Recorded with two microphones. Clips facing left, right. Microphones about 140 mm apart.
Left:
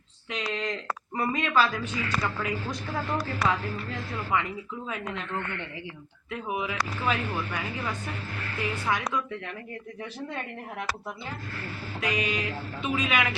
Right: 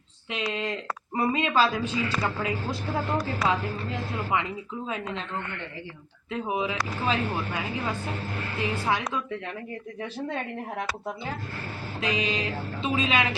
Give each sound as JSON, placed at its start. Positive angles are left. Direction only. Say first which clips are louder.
{"t": 0.3, "sound": "a sound", "louder": "right 2 dB", "side_deg": -20}
{"t": 1.1, "sound": "a woman's voice", "louder": "right 1 dB", "side_deg": -25}
{"t": 8.5, "sound": "a woman's voice", "louder": "right 2 dB", "side_deg": -20}
{"t": 11.9, "sound": "a woman's voice", "louder": "right 1 dB", "side_deg": -25}